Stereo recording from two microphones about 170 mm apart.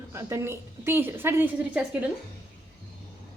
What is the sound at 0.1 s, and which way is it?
Speech, 15° right (ahead or behind).